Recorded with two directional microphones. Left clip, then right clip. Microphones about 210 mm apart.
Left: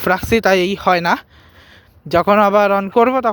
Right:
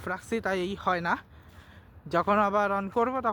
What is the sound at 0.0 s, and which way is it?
Speech, 40° left (ahead or behind).